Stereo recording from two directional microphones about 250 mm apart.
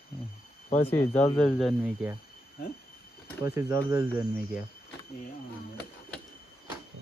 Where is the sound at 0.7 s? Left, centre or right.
Left.